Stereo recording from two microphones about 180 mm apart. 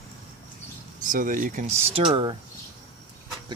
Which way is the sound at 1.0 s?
50° right (ahead or behind).